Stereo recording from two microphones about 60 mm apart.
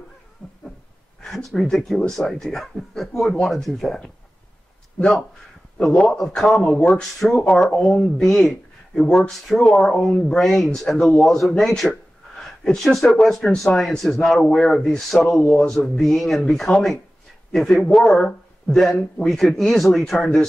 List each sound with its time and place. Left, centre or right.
0.4 s a sound: centre
1.2 s speech: centre
5.8 s a man's voice: centre